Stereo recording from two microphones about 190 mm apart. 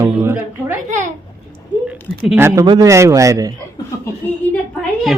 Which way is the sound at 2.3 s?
15° right (ahead or behind).